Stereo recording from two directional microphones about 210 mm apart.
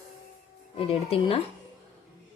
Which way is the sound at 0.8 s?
30° left (ahead or behind).